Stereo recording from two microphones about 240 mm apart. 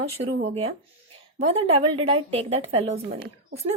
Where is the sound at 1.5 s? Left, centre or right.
Right.